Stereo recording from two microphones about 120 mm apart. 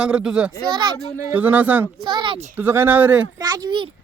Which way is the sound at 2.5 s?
15° right (ahead or behind).